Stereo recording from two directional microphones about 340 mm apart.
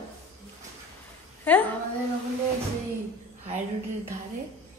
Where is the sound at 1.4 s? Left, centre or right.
Centre.